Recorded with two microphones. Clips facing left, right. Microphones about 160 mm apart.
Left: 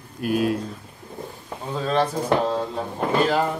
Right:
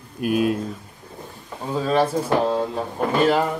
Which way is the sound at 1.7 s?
5° right (ahead or behind).